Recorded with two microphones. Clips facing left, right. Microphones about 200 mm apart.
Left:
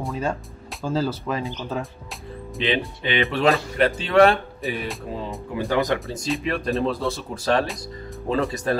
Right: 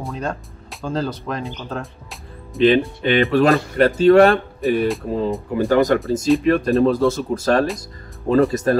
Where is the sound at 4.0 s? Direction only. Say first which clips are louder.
Right 7 dB; 40° right (ahead or behind).